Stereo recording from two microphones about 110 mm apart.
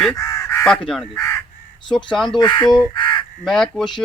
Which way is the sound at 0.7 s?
5° left (ahead or behind).